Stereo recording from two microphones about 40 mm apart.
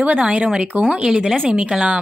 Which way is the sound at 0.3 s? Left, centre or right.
Right.